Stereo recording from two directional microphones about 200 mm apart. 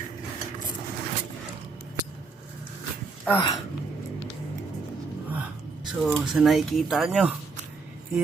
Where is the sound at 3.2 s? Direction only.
15° left (ahead or behind).